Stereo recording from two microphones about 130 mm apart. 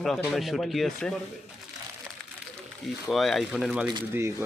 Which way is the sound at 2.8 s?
Centre (ahead or behind).